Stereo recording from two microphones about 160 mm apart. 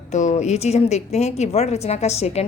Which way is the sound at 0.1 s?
45° left (ahead or behind).